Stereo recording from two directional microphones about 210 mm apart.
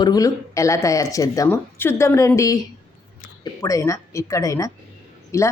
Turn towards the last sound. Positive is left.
turn(degrees=15)  # may be behind; listen again after turning